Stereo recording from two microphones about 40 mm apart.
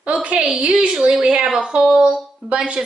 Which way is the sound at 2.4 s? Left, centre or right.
Right.